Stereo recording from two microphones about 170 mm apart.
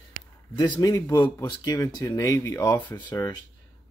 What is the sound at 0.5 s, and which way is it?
Speech, 25° left (ahead or behind).